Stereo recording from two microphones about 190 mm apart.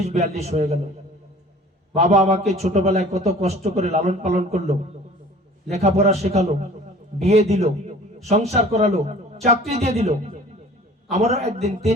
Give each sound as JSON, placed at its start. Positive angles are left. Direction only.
{"t": 0.0, "sound": "a man's voice", "side_deg": -35}
{"t": 2.0, "sound": "a man's voice", "side_deg": -35}